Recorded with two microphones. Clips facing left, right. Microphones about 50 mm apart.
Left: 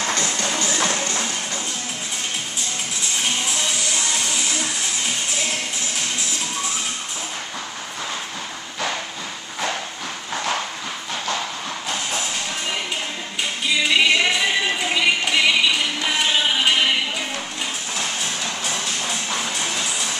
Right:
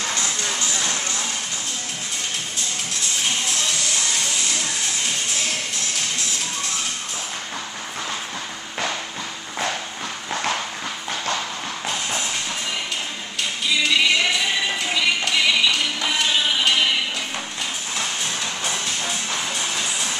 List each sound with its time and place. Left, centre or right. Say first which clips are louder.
13.4 s music: left 1 dB; centre